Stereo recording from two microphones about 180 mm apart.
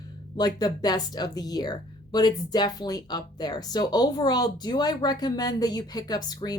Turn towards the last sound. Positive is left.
turn(degrees=20)  # may be behind; listen again after turning